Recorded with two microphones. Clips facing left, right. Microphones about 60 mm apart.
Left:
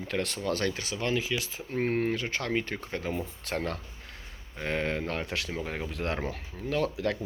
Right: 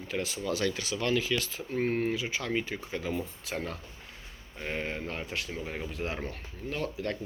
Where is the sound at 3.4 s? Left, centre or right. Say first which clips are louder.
Left 3 dB; left.